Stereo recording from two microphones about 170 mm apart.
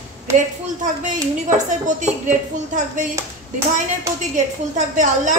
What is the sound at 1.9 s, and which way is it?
Speech, 45° right (ahead or behind).